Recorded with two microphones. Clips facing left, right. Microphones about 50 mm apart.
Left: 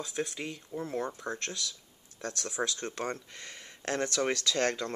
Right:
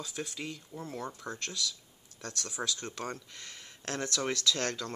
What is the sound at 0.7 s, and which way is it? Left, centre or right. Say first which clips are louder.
Speech: left 6 dB; left.